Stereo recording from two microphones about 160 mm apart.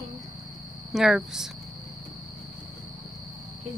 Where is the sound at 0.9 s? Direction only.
5° right (ahead or behind).